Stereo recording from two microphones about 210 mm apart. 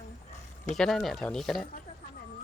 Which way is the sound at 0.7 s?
Centre (ahead or behind).